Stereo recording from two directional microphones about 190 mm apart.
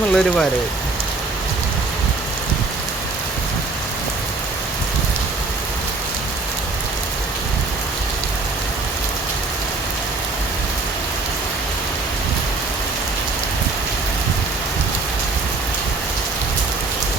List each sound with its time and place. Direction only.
0.1 s speech: centre (ahead or behind)